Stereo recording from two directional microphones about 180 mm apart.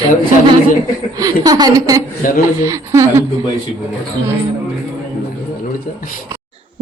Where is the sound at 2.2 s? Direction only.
50° left (ahead or behind).